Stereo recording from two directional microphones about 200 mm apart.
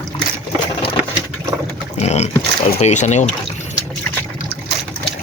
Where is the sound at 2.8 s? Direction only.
35° left (ahead or behind).